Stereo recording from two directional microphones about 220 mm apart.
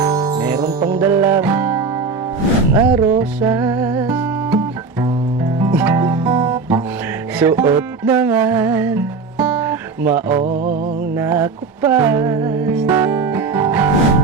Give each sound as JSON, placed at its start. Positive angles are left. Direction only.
{"t": 0.0, "sound": "music", "side_deg": -15}
{"t": 10.4, "sound": "music", "side_deg": -40}
{"t": 11.2, "sound": "music", "side_deg": -10}